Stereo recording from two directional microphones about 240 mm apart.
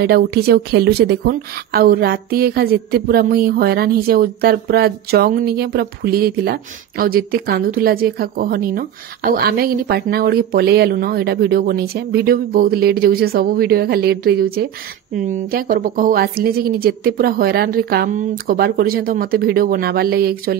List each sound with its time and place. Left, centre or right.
0.0 s a woman's voice: right